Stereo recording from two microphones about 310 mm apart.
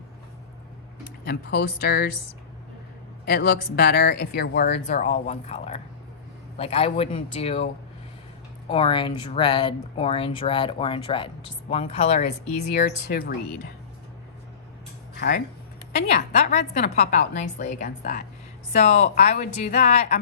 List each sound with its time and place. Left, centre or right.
1.2 s speech: left
3.2 s a woman's voice: left
8.7 s speech: centre
12.5 s a woman's voice: left
16.1 s a woman's voice: left